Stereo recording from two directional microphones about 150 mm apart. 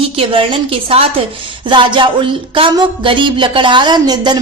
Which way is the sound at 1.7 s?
30° right (ahead or behind).